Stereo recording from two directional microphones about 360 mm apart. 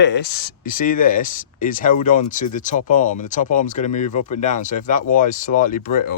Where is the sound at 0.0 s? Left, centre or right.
Left.